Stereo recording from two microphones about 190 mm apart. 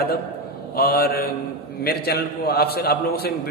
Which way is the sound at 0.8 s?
55° left (ahead or behind).